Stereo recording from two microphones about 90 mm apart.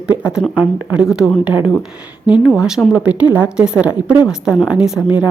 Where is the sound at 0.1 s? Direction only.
30° right (ahead or behind).